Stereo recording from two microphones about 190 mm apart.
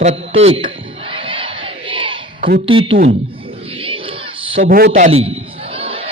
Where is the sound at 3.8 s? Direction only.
30° right (ahead or behind).